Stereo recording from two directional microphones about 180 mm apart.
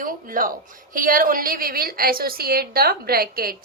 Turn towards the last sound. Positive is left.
turn(degrees=-55)  # may be behind; listen again after turning